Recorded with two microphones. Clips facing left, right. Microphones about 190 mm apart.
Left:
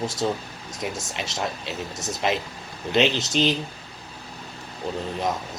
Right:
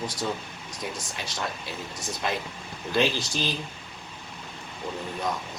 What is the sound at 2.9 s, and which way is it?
Speech, 20° left (ahead or behind).